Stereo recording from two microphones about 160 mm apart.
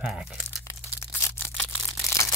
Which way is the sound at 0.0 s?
5° right (ahead or behind).